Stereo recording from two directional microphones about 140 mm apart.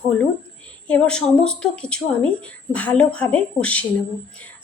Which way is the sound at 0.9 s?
10° left (ahead or behind).